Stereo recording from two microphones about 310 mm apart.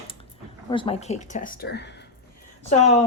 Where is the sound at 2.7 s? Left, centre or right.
Left.